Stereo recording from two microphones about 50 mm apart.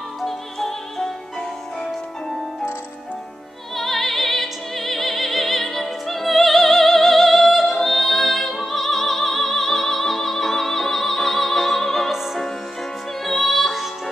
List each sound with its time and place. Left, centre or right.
0.2 s music: centre
3.7 s opera: centre
12.1 s music: centre